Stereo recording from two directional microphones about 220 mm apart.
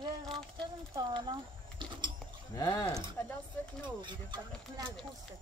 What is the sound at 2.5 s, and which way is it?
Speech, 15° left (ahead or behind).